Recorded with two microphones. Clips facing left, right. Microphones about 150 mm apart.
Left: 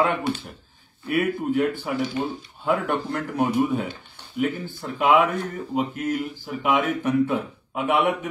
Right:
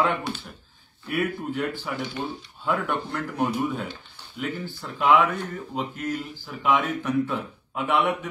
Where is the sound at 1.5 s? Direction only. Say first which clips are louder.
Left 6 dB; 50° left (ahead or behind).